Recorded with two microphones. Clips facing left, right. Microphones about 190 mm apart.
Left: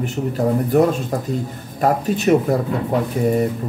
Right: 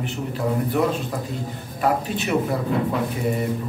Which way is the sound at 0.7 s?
45° left (ahead or behind).